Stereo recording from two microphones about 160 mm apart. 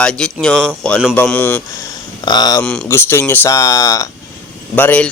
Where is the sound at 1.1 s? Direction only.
10° left (ahead or behind).